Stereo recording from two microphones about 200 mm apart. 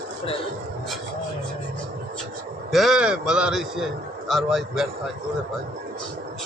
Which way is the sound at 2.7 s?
Centre (ahead or behind).